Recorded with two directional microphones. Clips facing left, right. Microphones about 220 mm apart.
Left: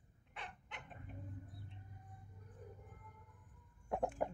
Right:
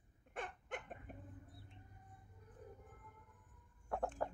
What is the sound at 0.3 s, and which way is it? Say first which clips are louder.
Dog: right 7 dB; 50° right (ahead or behind).